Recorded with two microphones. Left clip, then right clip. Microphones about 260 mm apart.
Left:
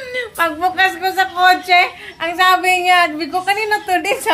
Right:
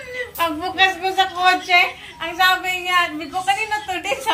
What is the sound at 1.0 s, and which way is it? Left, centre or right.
A woman's voice, centre.